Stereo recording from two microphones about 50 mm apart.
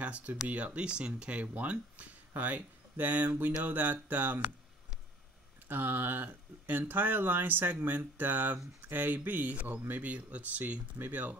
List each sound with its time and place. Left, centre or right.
0.0 s speech: right
0.7 s speech: right
5.7 s speech: right